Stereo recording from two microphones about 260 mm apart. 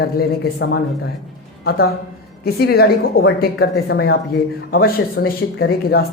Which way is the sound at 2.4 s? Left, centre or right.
Left.